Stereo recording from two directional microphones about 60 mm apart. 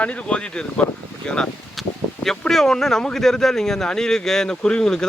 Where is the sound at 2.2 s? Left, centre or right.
Centre.